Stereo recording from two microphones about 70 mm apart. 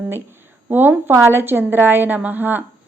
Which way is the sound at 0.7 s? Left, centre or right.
Right.